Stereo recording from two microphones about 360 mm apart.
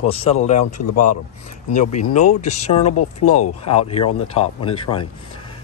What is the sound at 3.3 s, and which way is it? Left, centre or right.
Speech, left.